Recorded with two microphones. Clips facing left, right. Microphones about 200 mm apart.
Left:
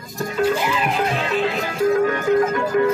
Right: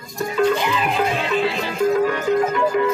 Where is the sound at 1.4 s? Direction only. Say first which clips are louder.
Left 1 dB; 45° left (ahead or behind).